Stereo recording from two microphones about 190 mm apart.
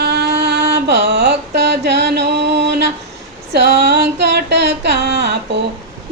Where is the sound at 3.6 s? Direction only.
60° right (ahead or behind).